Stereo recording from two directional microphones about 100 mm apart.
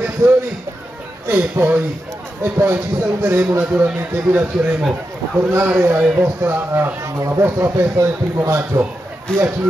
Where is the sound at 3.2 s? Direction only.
25° right (ahead or behind).